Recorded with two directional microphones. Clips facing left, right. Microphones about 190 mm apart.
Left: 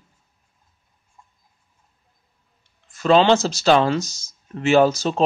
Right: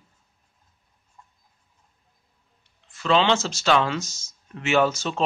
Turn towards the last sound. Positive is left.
turn(degrees=35)  # may be behind; listen again after turning